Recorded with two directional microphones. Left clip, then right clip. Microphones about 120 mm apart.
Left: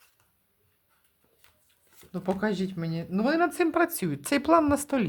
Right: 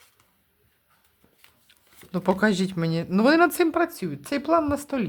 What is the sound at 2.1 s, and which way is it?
Speech, 60° right (ahead or behind).